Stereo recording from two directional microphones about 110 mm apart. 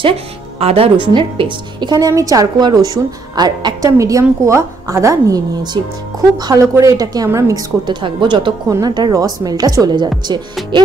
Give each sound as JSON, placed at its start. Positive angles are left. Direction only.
{"t": 0.6, "sound": "a woman's voice", "side_deg": -65}
{"t": 7.8, "sound": "a woman's voice", "side_deg": -45}
{"t": 8.6, "sound": "a woman's voice", "side_deg": -35}